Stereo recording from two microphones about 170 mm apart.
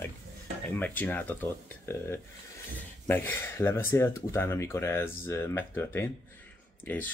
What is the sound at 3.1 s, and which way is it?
Speech, 10° left (ahead or behind).